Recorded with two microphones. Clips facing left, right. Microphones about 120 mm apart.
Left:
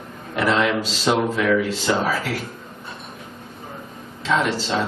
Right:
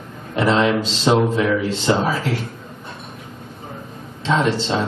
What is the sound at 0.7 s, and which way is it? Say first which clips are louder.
Speech: right 3 dB; centre (ahead or behind).